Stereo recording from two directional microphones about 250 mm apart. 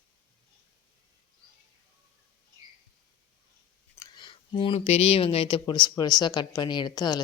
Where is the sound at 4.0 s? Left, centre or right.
Centre.